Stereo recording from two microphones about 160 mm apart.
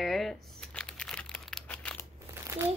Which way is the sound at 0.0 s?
Centre (ahead or behind).